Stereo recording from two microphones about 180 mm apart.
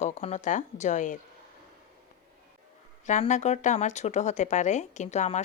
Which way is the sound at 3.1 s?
40° left (ahead or behind).